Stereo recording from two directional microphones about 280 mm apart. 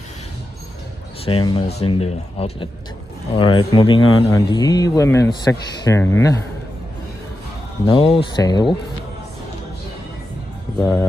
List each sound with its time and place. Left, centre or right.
1.2 s speech: centre
7.8 s speech: centre
10.8 s speech: centre